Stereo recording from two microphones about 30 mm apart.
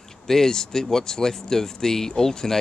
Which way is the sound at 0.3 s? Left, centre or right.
Centre.